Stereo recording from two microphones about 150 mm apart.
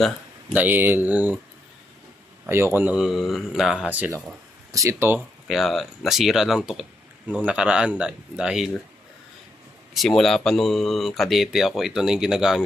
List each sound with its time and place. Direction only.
0.5 s speech: 10° right (ahead or behind)
2.5 s speech: 15° right (ahead or behind)
5.5 s speech: centre (ahead or behind)
9.9 s speech: centre (ahead or behind)